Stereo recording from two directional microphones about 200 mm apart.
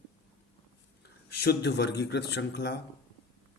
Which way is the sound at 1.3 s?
55° left (ahead or behind).